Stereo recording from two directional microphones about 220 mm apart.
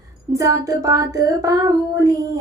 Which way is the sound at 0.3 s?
15° right (ahead or behind).